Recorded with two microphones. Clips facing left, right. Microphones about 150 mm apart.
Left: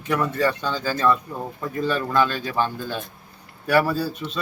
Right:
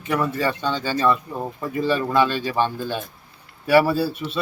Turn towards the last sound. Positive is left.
turn(degrees=-5)  # may be behind; listen again after turning